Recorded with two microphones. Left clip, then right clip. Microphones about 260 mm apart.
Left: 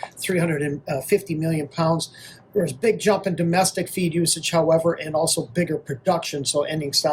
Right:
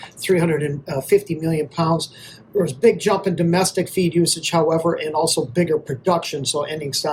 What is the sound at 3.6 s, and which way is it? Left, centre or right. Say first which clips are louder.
Speech: right 1 dB; left.